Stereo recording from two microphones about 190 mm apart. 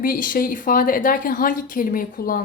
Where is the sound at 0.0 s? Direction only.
45° left (ahead or behind).